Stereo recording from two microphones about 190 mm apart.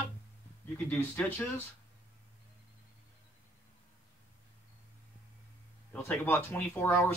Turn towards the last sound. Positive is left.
turn(degrees=10)  # may be behind; listen again after turning